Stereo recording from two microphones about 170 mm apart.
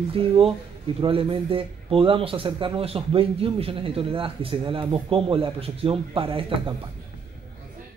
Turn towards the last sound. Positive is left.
turn(degrees=-30)  # may be behind; listen again after turning